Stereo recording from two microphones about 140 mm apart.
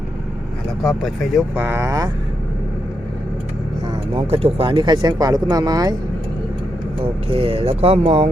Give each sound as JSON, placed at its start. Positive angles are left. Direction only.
{"t": 0.8, "sound": "speech", "side_deg": 0}
{"t": 1.5, "sound": "speech", "side_deg": -15}
{"t": 4.1, "sound": "speech", "side_deg": -45}
{"t": 7.0, "sound": "speech", "side_deg": -40}